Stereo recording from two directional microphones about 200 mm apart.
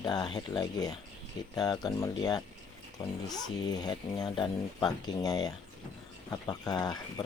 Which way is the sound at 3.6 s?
20° left (ahead or behind).